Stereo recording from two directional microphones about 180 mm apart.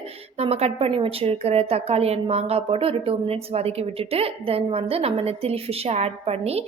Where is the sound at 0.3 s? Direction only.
35° right (ahead or behind).